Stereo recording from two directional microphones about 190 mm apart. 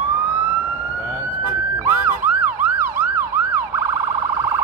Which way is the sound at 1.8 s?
10° right (ahead or behind).